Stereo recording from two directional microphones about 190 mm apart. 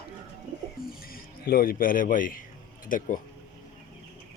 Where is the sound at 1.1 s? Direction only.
50° left (ahead or behind).